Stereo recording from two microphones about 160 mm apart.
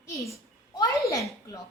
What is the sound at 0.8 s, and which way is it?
Speech, 20° left (ahead or behind).